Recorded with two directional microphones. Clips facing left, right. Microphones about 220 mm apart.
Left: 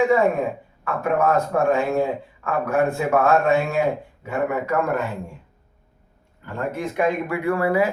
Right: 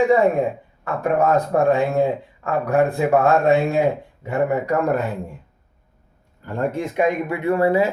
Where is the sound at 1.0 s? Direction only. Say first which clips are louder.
Right 2 dB; 35° right (ahead or behind).